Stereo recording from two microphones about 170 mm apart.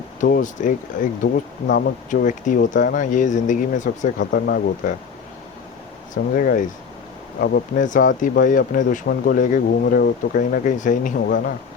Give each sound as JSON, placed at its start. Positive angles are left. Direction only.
{"t": 0.2, "sound": "speech", "side_deg": 55}
{"t": 1.2, "sound": "speech", "side_deg": 70}
{"t": 2.2, "sound": "speech", "side_deg": 50}
{"t": 4.2, "sound": "speech", "side_deg": 70}
{"t": 6.3, "sound": "speech", "side_deg": 55}
{"t": 7.3, "sound": "speech", "side_deg": 65}
{"t": 7.9, "sound": "speech", "side_deg": 50}
{"t": 11.3, "sound": "speech", "side_deg": 70}